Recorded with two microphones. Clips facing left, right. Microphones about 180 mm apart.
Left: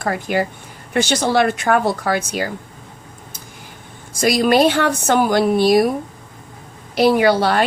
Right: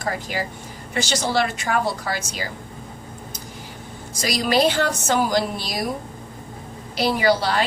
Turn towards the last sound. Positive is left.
turn(degrees=55)  # may be behind; listen again after turning